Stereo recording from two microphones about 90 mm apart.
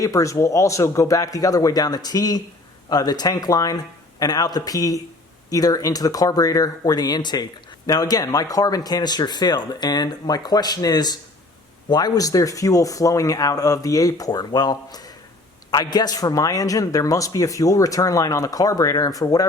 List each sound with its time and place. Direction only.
0.0 s a man's voice: 35° left (ahead or behind)